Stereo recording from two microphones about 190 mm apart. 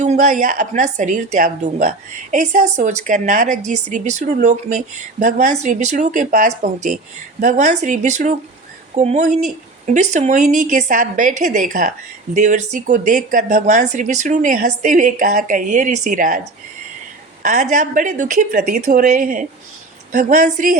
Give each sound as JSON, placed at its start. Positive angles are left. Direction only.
{"t": 0.0, "sound": "a woman's voice", "side_deg": -40}
{"t": 17.4, "sound": "speech", "side_deg": -40}